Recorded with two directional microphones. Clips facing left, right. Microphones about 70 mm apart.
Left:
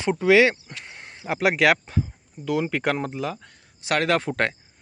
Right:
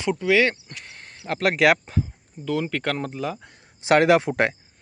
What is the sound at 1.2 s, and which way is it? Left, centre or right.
Speech, centre.